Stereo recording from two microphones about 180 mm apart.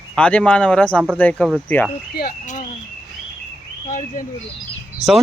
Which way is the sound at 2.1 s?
55° left (ahead or behind).